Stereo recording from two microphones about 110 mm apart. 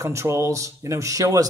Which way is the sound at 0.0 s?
25° right (ahead or behind).